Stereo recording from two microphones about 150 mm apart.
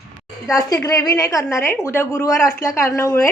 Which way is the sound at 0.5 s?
20° left (ahead or behind).